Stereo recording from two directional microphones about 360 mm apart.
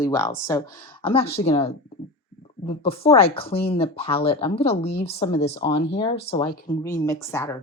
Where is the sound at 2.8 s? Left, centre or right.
Centre.